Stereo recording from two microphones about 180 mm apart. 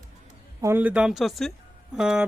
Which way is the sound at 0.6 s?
10° right (ahead or behind).